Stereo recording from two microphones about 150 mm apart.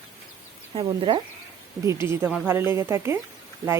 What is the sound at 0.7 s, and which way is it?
Speech, 30° right (ahead or behind).